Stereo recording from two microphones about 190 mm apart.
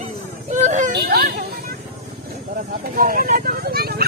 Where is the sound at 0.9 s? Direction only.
55° right (ahead or behind).